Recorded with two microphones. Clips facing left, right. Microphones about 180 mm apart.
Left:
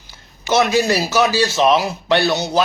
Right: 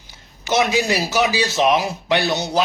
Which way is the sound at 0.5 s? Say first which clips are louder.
Left 3 dB; 15° right (ahead or behind).